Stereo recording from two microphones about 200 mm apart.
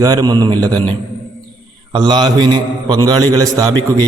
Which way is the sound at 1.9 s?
20° right (ahead or behind).